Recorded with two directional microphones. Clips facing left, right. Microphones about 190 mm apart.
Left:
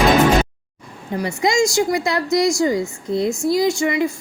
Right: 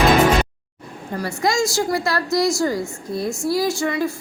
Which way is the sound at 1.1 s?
20° left (ahead or behind).